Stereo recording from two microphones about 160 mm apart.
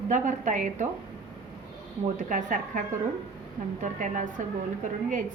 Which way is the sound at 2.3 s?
50° right (ahead or behind).